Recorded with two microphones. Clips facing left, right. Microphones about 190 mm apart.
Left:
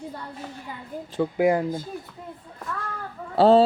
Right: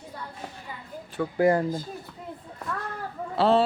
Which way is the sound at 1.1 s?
15° left (ahead or behind).